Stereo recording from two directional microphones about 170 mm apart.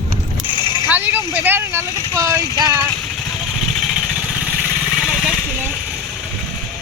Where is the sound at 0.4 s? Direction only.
30° left (ahead or behind).